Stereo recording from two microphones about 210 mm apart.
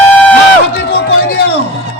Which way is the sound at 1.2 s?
50° left (ahead or behind).